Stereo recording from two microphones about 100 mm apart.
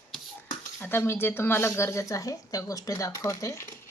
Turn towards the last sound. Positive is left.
turn(degrees=30)  # may be behind; listen again after turning